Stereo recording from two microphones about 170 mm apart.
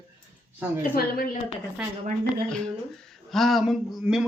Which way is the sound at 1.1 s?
55° left (ahead or behind).